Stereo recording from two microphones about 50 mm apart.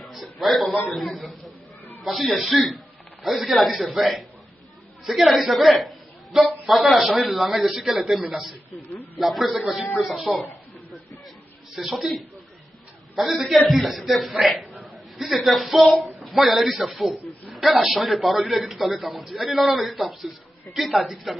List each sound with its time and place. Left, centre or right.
0.0 s a man's voice: centre
9.2 s a man's voice: centre
11.7 s a man's voice: centre